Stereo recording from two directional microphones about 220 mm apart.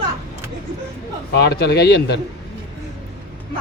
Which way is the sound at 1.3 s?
50° left (ahead or behind).